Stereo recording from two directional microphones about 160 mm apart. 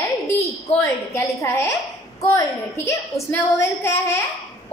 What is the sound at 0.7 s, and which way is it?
A woman's voice, 15° left (ahead or behind).